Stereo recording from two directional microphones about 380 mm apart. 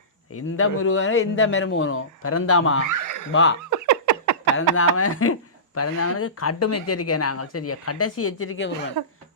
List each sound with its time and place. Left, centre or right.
0.3 s speech: left
2.8 s speech: right
3.3 s speech: left
3.7 s a sound: right
4.8 s speech: left
9.0 s speech: right